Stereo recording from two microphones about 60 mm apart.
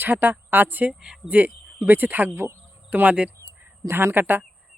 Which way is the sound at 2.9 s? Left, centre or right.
Right.